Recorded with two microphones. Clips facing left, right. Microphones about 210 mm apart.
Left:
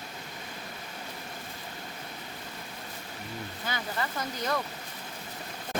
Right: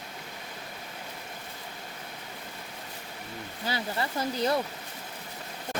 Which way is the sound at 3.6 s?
30° right (ahead or behind).